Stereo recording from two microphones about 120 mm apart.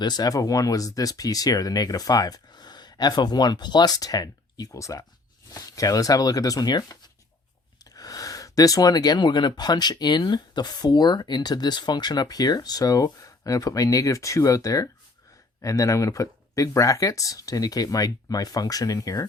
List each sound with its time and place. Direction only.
0.0 s speech: 35° left (ahead or behind)